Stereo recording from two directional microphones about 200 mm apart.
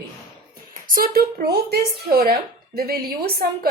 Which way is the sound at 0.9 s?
45° right (ahead or behind).